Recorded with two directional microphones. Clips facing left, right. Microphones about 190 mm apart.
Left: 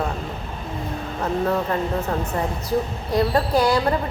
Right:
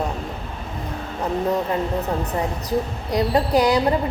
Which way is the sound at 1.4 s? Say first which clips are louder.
Right 1 dB; 15° right (ahead or behind).